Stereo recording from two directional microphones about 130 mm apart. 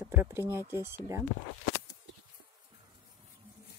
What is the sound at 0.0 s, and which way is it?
Speech, 15° right (ahead or behind).